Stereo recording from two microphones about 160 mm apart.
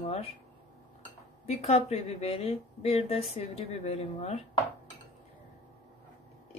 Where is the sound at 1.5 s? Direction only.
40° left (ahead or behind).